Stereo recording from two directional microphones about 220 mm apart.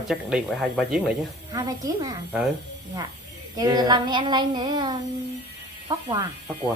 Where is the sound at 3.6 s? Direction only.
15° right (ahead or behind).